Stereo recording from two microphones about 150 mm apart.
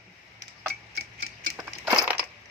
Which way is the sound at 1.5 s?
10° right (ahead or behind).